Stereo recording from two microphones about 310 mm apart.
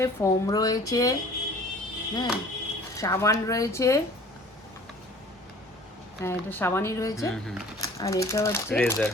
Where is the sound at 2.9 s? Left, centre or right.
Centre.